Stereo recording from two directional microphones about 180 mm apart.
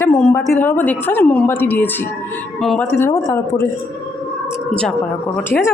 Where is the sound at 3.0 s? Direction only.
15° left (ahead or behind).